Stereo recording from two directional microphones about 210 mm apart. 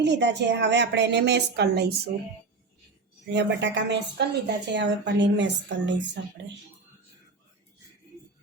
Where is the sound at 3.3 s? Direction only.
55° right (ahead or behind).